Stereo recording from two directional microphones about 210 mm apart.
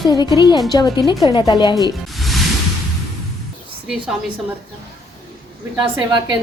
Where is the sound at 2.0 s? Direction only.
Centre (ahead or behind).